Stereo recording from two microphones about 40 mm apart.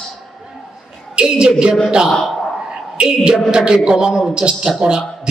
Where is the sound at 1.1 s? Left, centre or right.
Right.